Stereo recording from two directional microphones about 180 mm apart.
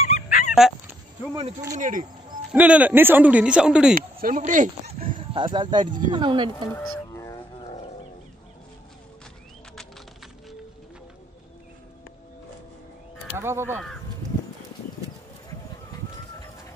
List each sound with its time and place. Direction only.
0.0 s dog: 40° left (ahead or behind)
1.8 s speech: 45° right (ahead or behind)
2.5 s speech: 10° right (ahead or behind)
3.9 s speech: 50° right (ahead or behind); by 6.7 s 25° right (ahead or behind)
6.7 s music: 15° left (ahead or behind)
13.3 s speech: 15° right (ahead or behind)